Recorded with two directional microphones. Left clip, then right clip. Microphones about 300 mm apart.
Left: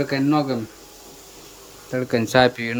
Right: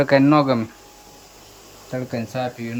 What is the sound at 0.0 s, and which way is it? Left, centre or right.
Speech, centre.